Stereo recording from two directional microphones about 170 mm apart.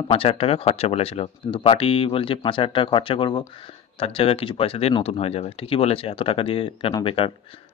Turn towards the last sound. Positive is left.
turn(degrees=30)  # may be behind; listen again after turning